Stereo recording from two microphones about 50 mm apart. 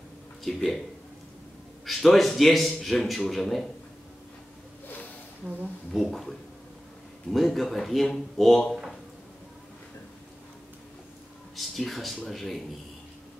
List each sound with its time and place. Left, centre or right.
0.4 s speech: centre
1.9 s a man's voice: centre
5.9 s a man's voice: centre
7.3 s a man's voice: centre
11.5 s a sound: centre
12.3 s a man's voice: centre